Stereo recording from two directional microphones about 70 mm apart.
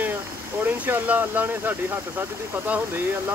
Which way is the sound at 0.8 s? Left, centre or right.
Right.